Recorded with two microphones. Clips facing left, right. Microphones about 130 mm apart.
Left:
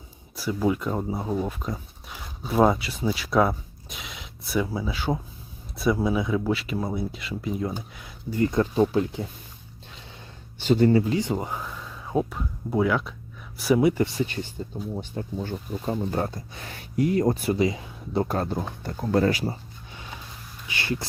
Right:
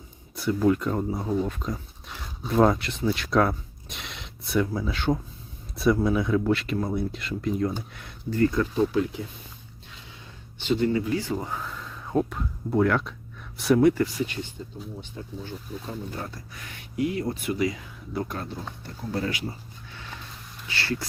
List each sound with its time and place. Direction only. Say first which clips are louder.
0.3 s speech: right 2 dB; 5° left (ahead or behind)
8.3 s speech: even; 20° left (ahead or behind)
10.6 s speech: left 5 dB; 40° left (ahead or behind)
11.1 s speech: left 2 dB; 20° left (ahead or behind); by 13.9 s 5° left (ahead or behind)
14.0 s speech: left 1 dB; 30° left (ahead or behind)
14.9 s speech: left 7 dB; 50° left (ahead or behind)
16.3 s speech: left 4 dB; 30° left (ahead or behind)
17.6 s speech: left 3 dB; 25° left (ahead or behind); by 19.3 s 50° left (ahead or behind)
19.3 s speech: left 6 dB; 35° left (ahead or behind)
19.9 s vehicle: left 1 dB; 15° left (ahead or behind)
20.7 s speech: left 1 dB; 15° left (ahead or behind)